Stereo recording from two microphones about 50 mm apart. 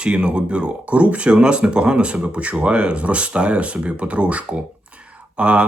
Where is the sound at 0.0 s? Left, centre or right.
Right.